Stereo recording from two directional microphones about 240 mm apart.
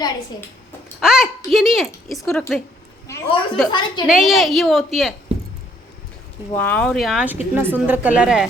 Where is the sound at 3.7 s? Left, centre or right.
Centre.